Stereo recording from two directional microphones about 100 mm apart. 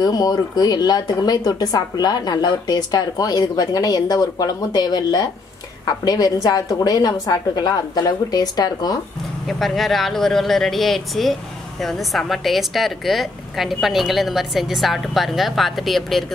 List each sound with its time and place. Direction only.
0.0 s speech: 40° left (ahead or behind)
9.5 s a woman's voice: 5° left (ahead or behind)